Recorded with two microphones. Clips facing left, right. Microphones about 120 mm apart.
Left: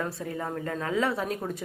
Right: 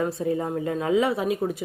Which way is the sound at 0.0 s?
20° right (ahead or behind).